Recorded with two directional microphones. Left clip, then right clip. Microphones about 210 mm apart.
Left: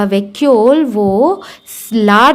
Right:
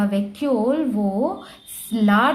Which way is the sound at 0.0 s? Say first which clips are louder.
Left 11 dB; 45° left (ahead or behind).